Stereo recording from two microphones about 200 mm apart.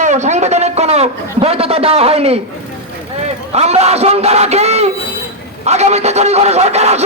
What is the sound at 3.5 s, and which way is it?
A man's voice, 30° right (ahead or behind).